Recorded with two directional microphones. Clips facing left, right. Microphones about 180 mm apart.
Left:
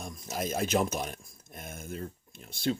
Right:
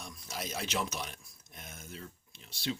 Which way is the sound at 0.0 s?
50° left (ahead or behind).